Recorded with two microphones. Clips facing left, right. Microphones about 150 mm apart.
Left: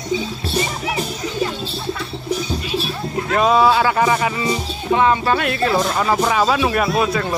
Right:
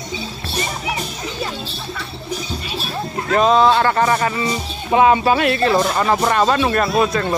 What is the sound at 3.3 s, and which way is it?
Speech, 5° left (ahead or behind).